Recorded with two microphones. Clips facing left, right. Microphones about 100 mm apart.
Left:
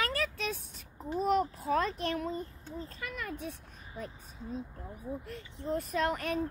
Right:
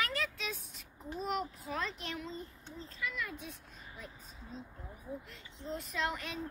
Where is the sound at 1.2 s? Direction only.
45° left (ahead or behind).